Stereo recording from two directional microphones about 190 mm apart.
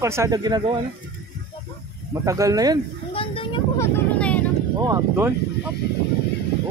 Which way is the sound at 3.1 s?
30° left (ahead or behind).